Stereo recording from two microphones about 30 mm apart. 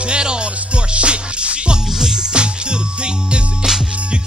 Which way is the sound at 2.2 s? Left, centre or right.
Right.